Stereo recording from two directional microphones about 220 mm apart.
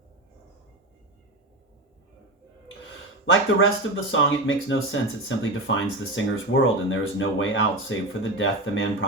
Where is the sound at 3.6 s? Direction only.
60° left (ahead or behind).